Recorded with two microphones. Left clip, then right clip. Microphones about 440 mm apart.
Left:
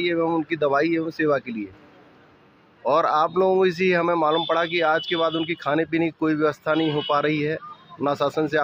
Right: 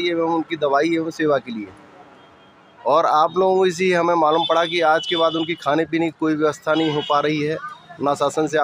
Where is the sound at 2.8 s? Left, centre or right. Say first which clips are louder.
Right 4 dB; left.